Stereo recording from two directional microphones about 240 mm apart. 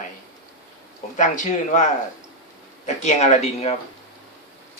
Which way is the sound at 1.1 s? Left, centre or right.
Left.